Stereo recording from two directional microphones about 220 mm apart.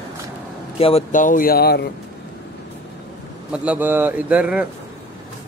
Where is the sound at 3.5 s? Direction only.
5° right (ahead or behind).